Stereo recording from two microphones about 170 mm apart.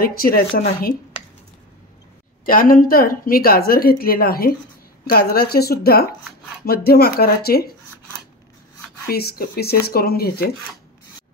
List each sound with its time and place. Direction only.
0.0 s speech: 60° left (ahead or behind)
2.4 s speech: 55° left (ahead or behind)
9.1 s speech: 65° left (ahead or behind)